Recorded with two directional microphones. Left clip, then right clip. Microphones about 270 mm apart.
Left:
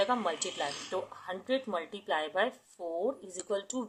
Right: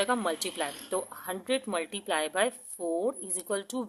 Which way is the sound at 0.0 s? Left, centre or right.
Right.